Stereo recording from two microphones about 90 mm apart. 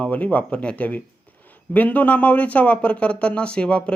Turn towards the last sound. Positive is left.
turn(degrees=10)  # may be behind; listen again after turning